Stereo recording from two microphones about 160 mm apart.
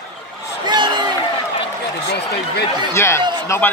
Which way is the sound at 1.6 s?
90° left.